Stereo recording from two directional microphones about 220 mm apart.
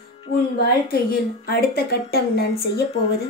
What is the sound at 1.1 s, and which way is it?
A woman's voice, 45° left (ahead or behind).